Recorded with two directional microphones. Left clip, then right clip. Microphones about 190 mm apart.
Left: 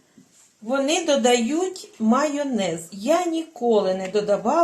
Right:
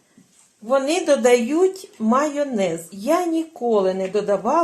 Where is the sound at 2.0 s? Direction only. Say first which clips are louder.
Right 1 dB; 25° right (ahead or behind).